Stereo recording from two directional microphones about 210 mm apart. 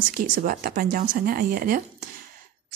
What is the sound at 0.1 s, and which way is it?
Speech, 40° right (ahead or behind).